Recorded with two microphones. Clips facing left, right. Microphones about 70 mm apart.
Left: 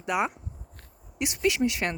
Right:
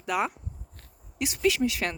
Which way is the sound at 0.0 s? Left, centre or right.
Centre.